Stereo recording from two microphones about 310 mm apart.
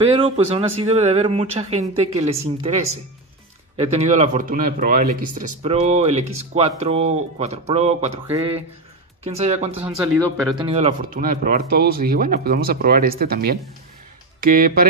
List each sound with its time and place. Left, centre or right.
0.0 s speech: centre